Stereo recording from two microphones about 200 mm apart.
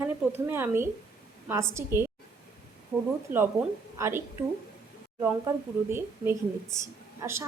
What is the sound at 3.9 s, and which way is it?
Speech, 15° right (ahead or behind).